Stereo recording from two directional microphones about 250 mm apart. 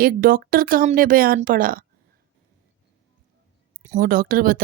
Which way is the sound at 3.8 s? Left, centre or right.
Right.